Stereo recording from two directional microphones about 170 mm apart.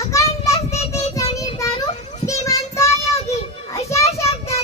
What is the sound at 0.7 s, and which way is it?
Child singing, 40° left (ahead or behind).